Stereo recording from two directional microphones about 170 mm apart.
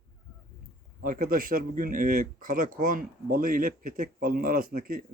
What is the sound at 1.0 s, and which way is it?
Speech, 55° right (ahead or behind).